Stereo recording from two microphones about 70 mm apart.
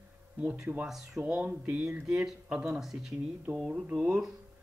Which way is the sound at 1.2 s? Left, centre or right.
Centre.